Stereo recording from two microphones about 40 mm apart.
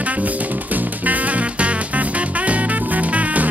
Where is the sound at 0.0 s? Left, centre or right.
Right.